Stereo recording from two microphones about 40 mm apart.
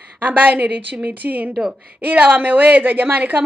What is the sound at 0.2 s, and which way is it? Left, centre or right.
A woman's voice, right.